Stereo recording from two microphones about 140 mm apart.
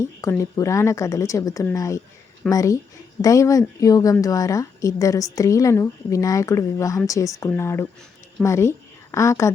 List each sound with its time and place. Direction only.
0.0 s a woman's voice: 20° left (ahead or behind)